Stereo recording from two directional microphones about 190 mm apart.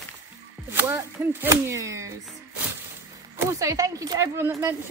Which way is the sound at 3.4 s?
15° right (ahead or behind).